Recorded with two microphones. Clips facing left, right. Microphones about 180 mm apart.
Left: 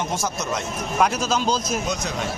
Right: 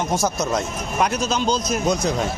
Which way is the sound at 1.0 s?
5° left (ahead or behind).